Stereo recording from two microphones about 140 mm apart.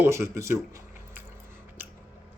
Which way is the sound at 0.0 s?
20° right (ahead or behind).